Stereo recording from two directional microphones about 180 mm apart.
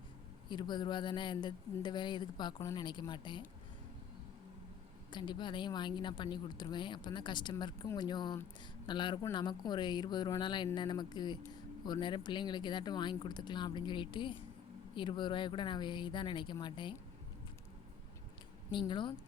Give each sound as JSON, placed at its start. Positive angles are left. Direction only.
{"t": 0.4, "sound": "speech", "side_deg": 25}
{"t": 5.1, "sound": "speech", "side_deg": 25}
{"t": 18.7, "sound": "speech", "side_deg": 25}